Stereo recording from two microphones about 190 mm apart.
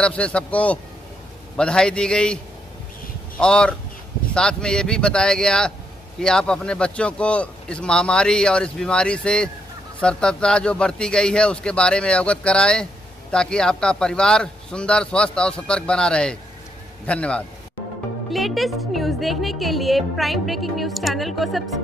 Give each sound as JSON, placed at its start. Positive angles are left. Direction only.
{"t": 0.0, "sound": "a woman's voice", "side_deg": 5}